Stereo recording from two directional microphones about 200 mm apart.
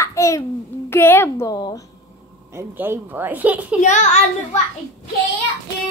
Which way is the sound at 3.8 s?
35° left (ahead or behind).